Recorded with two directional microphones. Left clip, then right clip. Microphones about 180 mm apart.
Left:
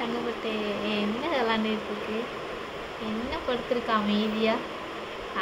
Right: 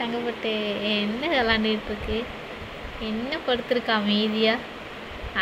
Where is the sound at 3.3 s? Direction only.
30° right (ahead or behind).